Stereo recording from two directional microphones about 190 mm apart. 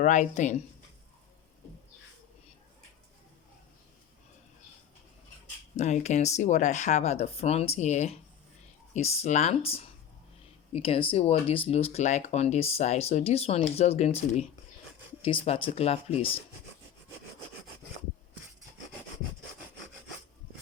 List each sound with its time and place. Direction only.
0.0 s speech: 40° left (ahead or behind)
5.7 s speech: 35° left (ahead or behind)